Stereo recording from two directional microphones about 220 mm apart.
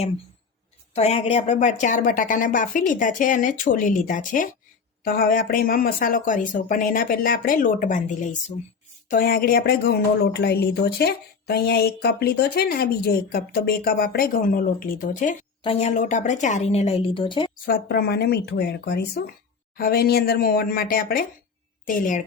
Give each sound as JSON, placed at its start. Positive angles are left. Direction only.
{"t": 0.9, "sound": "a woman's voice", "side_deg": 30}
{"t": 17.7, "sound": "speech", "side_deg": 45}